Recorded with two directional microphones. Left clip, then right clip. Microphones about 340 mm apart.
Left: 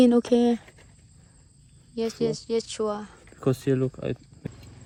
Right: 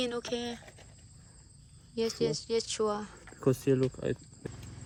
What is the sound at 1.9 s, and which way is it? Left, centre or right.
Speech, centre.